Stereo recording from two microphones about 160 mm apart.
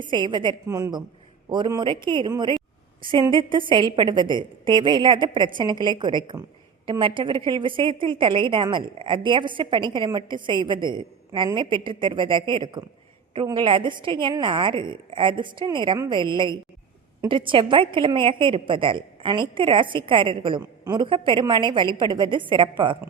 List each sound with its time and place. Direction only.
0.0 s a woman's voice: 30° right (ahead or behind)